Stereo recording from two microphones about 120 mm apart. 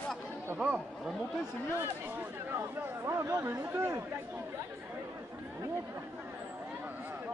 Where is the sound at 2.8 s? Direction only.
20° right (ahead or behind).